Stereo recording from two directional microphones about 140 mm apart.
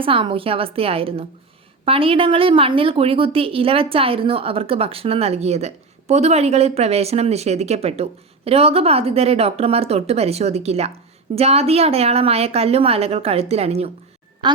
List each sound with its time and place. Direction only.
0.0 s a woman's voice: 40° right (ahead or behind)